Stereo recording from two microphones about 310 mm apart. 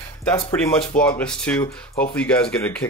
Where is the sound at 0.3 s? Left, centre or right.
Centre.